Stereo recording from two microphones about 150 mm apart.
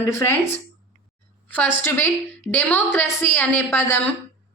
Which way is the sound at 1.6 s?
15° left (ahead or behind).